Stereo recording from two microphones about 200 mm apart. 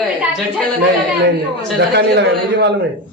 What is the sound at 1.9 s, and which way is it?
Speech, 60° right (ahead or behind).